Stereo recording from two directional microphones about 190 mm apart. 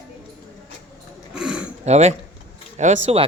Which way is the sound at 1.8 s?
35° right (ahead or behind).